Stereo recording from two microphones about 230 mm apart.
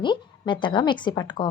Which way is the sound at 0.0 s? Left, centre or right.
Centre.